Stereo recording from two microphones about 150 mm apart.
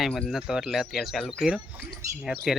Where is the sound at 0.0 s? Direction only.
Centre (ahead or behind).